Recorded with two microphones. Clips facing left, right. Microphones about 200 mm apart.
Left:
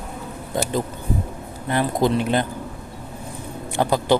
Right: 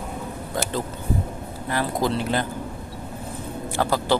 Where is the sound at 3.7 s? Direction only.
20° left (ahead or behind).